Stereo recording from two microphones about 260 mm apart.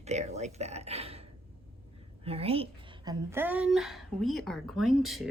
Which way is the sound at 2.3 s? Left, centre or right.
Right.